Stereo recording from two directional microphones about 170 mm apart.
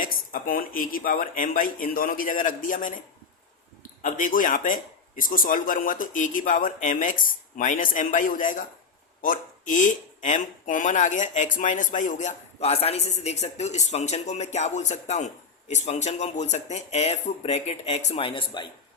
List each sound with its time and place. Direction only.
0.0 s speech: 55° left (ahead or behind)
4.0 s speech: 50° left (ahead or behind); by 18.7 s 30° left (ahead or behind)